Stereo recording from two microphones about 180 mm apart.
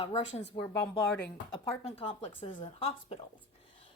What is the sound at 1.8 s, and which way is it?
Speech, 35° left (ahead or behind).